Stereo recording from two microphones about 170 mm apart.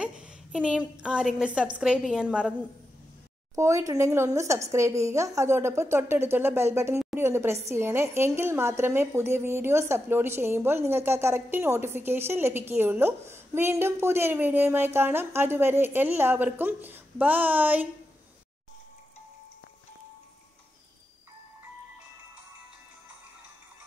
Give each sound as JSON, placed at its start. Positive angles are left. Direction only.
{"t": 0.0, "sound": "a woman's voice", "side_deg": -5}
{"t": 3.5, "sound": "a woman's voice", "side_deg": -15}